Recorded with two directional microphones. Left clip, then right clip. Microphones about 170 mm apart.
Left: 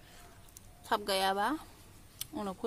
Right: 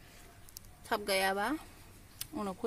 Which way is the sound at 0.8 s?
5° right (ahead or behind).